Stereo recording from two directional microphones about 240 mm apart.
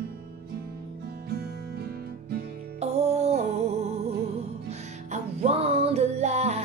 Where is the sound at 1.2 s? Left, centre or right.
Right.